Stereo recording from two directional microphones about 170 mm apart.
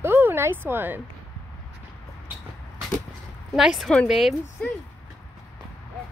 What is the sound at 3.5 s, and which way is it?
Speech, centre (ahead or behind).